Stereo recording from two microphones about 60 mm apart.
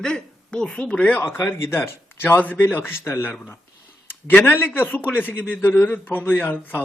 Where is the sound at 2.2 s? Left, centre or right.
Left.